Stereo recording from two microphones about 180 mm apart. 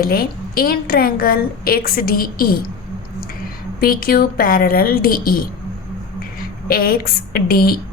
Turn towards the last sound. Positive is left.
turn(degrees=55)  # may be behind; listen again after turning